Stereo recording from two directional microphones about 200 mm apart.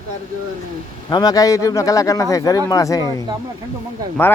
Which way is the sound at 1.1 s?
20° left (ahead or behind).